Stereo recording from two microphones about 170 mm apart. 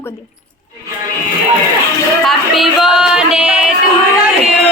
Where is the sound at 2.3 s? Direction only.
Centre (ahead or behind).